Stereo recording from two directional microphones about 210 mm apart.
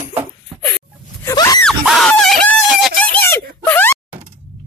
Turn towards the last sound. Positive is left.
turn(degrees=10)  # may be behind; listen again after turning